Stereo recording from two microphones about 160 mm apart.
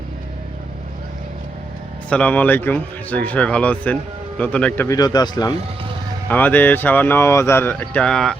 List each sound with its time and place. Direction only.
2.0 s speech: 10° left (ahead or behind)
4.9 s speech: 25° left (ahead or behind)
6.2 s speech: 10° left (ahead or behind)